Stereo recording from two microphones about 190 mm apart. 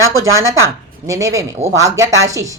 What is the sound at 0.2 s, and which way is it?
Speech, 15° right (ahead or behind).